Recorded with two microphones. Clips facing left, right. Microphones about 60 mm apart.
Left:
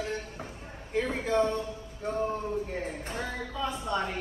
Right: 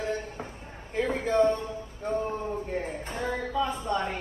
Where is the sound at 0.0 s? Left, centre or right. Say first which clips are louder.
Right 3 dB; right.